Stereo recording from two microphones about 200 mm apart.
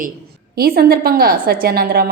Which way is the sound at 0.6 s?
50° right (ahead or behind).